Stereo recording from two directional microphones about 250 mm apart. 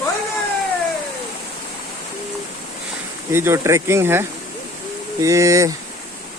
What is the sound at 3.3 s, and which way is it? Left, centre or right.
Speech, centre.